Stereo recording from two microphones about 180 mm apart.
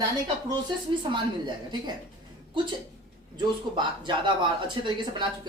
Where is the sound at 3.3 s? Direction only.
25° right (ahead or behind).